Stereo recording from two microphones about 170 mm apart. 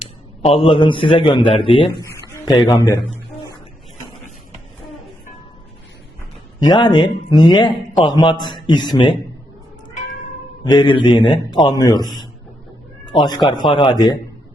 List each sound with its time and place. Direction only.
0.4 s a man's voice: 35° left (ahead or behind)
2.0 s a man's voice: 20° left (ahead or behind)
6.6 s a man's voice: 25° left (ahead or behind)
10.6 s a man's voice: 25° left (ahead or behind)
13.5 s a man's voice: 25° left (ahead or behind)